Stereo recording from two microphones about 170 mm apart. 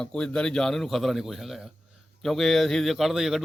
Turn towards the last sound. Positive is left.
turn(degrees=0)  # may be behind; listen again after turning